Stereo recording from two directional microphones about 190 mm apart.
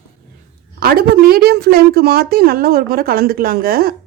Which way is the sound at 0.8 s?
50° right (ahead or behind).